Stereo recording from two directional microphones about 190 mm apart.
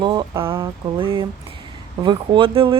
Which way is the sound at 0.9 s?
25° right (ahead or behind).